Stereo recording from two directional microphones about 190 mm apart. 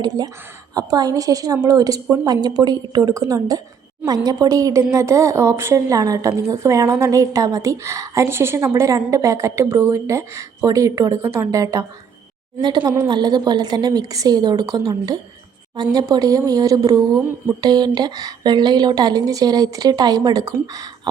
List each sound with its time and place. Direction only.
0.0 s a woman's voice: 20° right (ahead or behind)
13.1 s a woman's voice: 25° right (ahead or behind)